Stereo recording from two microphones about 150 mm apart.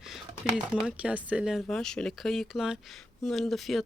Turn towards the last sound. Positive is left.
turn(degrees=0)  # may be behind; listen again after turning